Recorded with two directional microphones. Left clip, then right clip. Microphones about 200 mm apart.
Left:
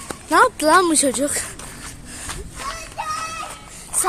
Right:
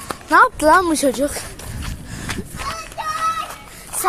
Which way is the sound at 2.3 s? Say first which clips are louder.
Right 6 dB; 30° right (ahead or behind).